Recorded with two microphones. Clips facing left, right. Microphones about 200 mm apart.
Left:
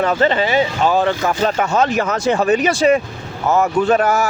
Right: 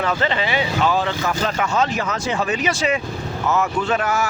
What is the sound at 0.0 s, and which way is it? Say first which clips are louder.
Speech: left 5 dB; 40° left (ahead or behind).